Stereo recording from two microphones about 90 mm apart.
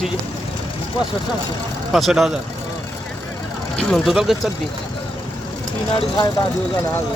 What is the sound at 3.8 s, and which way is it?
Speech, 5° left (ahead or behind).